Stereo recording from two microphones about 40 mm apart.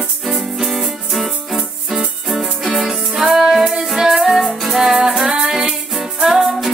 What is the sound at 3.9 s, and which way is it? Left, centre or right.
Music, centre.